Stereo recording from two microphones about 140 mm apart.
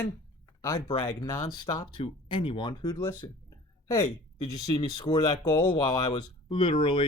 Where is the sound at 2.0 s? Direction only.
40° left (ahead or behind).